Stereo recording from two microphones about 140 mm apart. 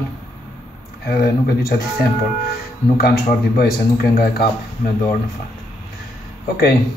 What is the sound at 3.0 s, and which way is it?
Speech, 90° left.